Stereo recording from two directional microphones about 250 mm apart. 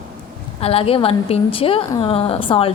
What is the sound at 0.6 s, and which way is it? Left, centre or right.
A woman's voice, left.